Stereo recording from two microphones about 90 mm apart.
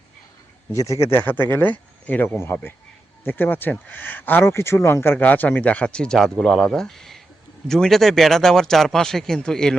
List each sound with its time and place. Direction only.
0.7 s speech: 35° left (ahead or behind)
1.1 s speech: 20° left (ahead or behind); by 9.7 s 5° left (ahead or behind)